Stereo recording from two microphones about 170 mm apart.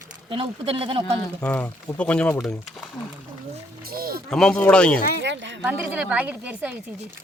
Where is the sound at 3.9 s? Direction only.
60° right (ahead or behind).